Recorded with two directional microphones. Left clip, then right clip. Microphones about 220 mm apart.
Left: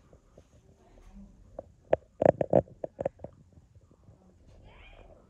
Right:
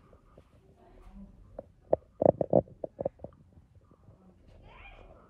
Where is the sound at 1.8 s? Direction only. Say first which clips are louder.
Left 1 dB; 35° right (ahead or behind).